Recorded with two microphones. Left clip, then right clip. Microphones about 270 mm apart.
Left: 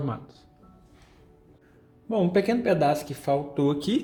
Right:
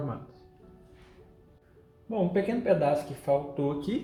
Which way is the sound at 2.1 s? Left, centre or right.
Left.